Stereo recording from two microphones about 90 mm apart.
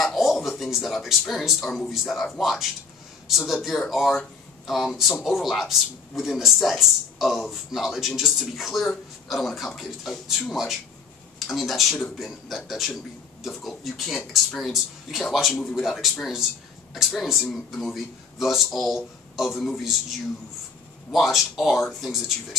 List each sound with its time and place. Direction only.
0.0 s a man's voice: centre (ahead or behind)